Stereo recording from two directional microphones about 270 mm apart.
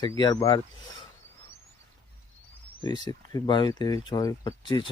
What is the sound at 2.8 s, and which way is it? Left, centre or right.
Speech, centre.